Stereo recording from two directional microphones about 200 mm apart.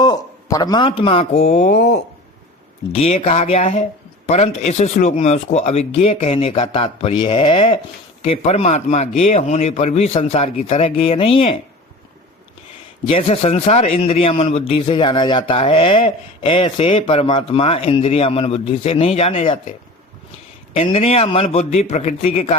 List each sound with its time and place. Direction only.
0.0 s a man's voice: 20° left (ahead or behind)
13.1 s a man's voice: 30° left (ahead or behind)
20.7 s speech: 30° left (ahead or behind)